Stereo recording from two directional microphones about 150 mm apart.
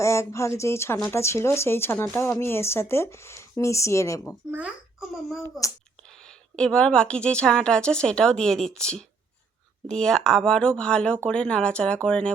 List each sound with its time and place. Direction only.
0.0 s speech: 20° left (ahead or behind)
4.5 s a child's voice: 5° right (ahead or behind)
6.6 s speech: 5° left (ahead or behind)